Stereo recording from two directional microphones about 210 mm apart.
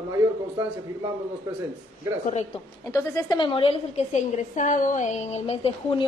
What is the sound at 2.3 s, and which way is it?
Speech, 30° left (ahead or behind).